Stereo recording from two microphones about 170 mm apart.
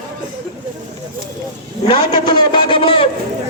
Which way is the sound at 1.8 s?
30° left (ahead or behind).